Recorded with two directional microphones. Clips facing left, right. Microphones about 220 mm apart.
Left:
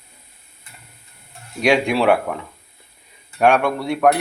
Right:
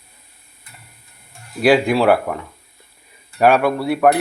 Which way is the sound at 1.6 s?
5° right (ahead or behind).